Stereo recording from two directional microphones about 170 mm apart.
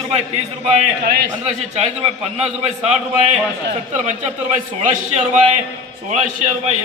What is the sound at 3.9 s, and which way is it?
Speech, 45° right (ahead or behind).